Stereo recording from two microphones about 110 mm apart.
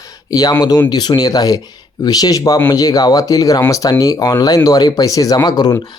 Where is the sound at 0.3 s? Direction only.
35° left (ahead or behind).